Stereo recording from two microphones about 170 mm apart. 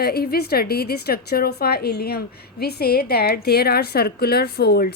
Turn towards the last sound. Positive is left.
turn(degrees=70)  # may be behind; listen again after turning